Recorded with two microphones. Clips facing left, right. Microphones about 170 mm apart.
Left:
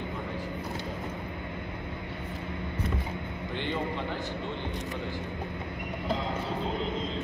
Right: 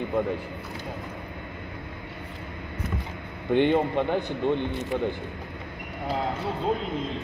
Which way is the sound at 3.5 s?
60° right (ahead or behind).